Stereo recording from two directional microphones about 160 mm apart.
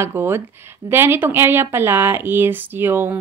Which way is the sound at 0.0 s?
15° right (ahead or behind).